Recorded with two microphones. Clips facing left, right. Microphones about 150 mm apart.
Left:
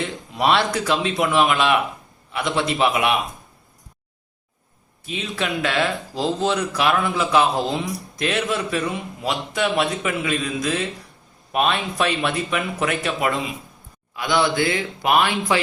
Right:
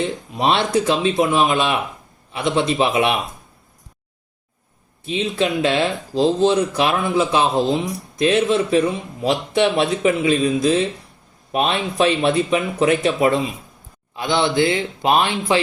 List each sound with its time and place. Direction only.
0.0 s a man's voice: 25° right (ahead or behind)
5.0 s a man's voice: 25° right (ahead or behind)